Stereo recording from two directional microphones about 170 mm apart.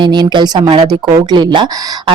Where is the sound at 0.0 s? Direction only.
25° right (ahead or behind).